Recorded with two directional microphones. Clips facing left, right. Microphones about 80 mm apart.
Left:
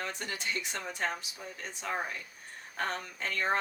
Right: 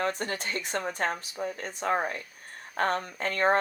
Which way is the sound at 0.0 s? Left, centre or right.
Right.